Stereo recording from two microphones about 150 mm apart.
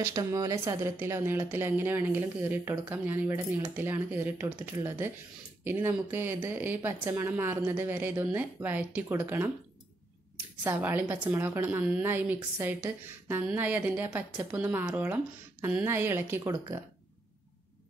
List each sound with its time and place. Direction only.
0.0 s a woman's voice: 20° right (ahead or behind)